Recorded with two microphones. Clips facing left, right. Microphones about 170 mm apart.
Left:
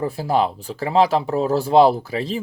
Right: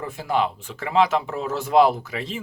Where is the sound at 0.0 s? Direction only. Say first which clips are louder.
Left 4 dB; 35° left (ahead or behind).